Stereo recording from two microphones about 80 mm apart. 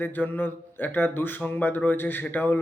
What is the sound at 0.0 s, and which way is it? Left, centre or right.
Speech, left.